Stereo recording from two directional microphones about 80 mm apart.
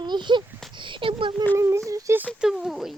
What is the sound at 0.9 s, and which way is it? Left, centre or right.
Speech, right.